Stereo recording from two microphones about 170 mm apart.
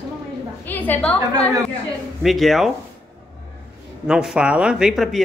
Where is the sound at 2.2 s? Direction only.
Centre (ahead or behind).